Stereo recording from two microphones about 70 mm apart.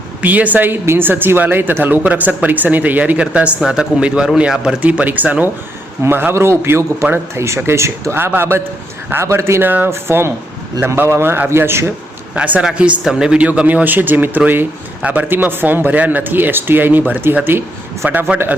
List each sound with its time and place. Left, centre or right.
0.2 s speech: right
4.8 s a man's voice: right
12.3 s speech: centre